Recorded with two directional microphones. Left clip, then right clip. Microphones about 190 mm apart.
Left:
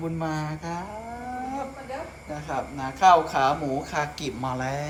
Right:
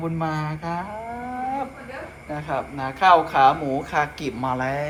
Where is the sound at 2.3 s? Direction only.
15° left (ahead or behind).